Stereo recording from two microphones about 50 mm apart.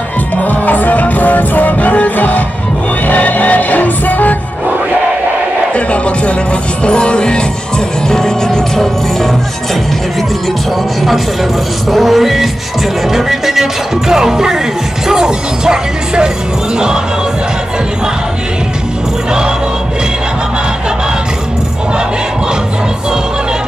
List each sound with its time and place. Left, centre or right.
0.4 s music: left
5.9 s music: left
11.9 s music: centre